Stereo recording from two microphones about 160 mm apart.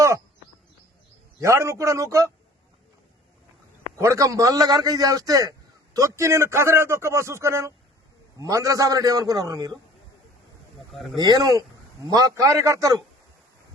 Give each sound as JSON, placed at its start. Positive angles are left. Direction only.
{"t": 1.4, "sound": "a man's voice", "side_deg": -15}
{"t": 3.9, "sound": "a man's voice", "side_deg": -20}
{"t": 10.9, "sound": "speech", "side_deg": 0}
{"t": 11.2, "sound": "a man's voice", "side_deg": -25}